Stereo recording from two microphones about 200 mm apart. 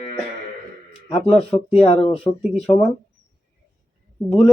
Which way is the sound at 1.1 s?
30° left (ahead or behind).